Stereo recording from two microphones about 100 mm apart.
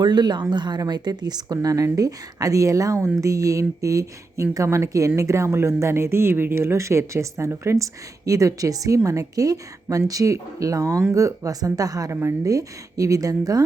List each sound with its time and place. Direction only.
0.0 s speech: 45° right (ahead or behind)